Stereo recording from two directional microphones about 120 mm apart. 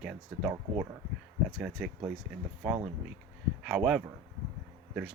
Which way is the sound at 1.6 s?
5° right (ahead or behind).